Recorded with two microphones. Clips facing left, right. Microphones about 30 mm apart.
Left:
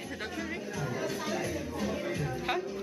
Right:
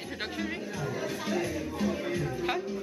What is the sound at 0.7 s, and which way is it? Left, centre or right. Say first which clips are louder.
Music: left 2 dB; centre.